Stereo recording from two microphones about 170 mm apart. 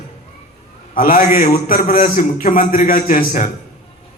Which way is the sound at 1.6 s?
55° left (ahead or behind).